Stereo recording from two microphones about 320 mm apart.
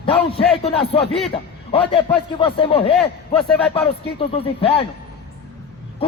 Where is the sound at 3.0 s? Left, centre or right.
Centre.